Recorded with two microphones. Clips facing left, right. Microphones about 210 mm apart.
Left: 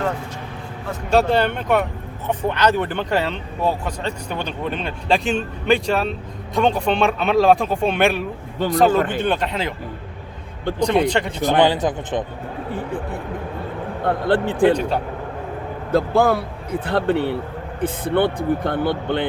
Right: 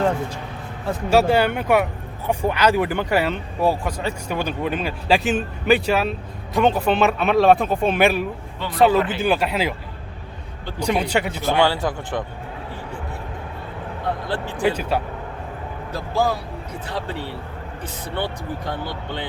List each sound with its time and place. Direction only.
1.1 s speech: 10° right (ahead or behind)
8.5 s speech: 45° left (ahead or behind)
9.2 s speech: 5° right (ahead or behind)
10.8 s speech: 10° right (ahead or behind)
11.4 s speech: 15° left (ahead or behind)
14.0 s speech: 55° left (ahead or behind)
14.8 s speech: 5° right (ahead or behind)
15.9 s speech: 55° left (ahead or behind)